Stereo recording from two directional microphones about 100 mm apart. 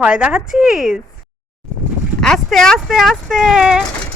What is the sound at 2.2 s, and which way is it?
Speech, 5° left (ahead or behind).